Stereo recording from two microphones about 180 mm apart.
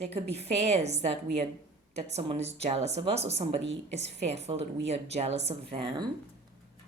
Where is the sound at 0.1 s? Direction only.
35° right (ahead or behind).